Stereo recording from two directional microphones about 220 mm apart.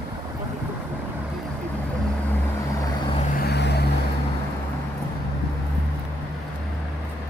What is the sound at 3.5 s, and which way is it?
Vehicle, 50° left (ahead or behind).